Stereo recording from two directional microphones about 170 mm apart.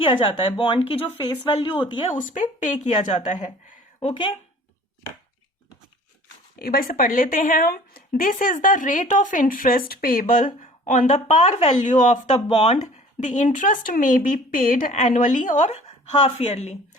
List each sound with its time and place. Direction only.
0.0 s a woman's voice: 30° left (ahead or behind)
2.1 s a woman's voice: 50° left (ahead or behind)
6.6 s a woman's voice: 60° left (ahead or behind)
12.5 s a woman's voice: 35° left (ahead or behind)
16.1 s a woman's voice: 35° left (ahead or behind)